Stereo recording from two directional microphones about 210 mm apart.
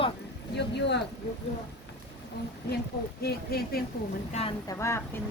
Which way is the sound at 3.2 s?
50° left (ahead or behind).